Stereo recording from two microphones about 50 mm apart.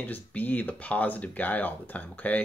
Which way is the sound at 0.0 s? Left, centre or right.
Left.